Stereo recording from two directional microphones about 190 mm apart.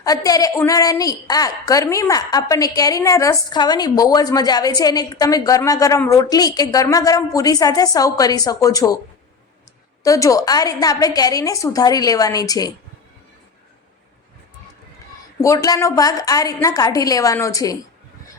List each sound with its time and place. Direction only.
0.0 s a woman's voice: 20° left (ahead or behind)
10.0 s a woman's voice: 15° left (ahead or behind)
15.4 s a woman's voice: 20° left (ahead or behind)